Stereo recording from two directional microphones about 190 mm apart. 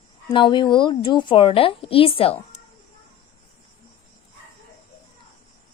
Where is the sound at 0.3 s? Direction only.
25° left (ahead or behind).